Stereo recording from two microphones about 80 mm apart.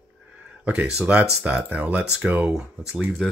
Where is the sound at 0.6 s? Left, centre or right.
Centre.